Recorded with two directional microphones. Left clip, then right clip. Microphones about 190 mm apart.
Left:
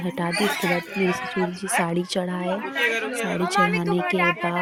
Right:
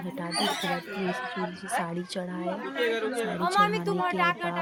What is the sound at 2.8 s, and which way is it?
Speech, 20° left (ahead or behind).